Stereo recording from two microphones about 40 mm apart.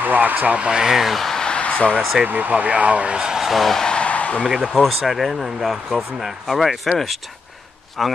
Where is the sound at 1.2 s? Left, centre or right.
Centre.